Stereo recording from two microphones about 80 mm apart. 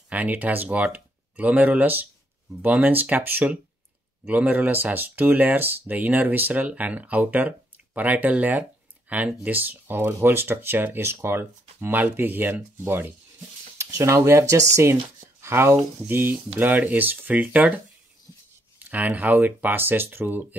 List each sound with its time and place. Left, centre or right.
0.1 s speech: right
18.8 s speech: centre